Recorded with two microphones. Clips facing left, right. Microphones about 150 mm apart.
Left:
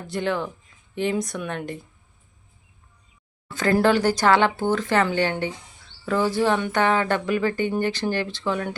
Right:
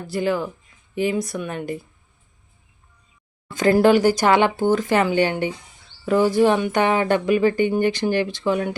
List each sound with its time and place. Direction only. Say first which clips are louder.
0.1 s speech: right 3 dB; 5° right (ahead or behind)
3.5 s speech: right 4 dB; 15° right (ahead or behind)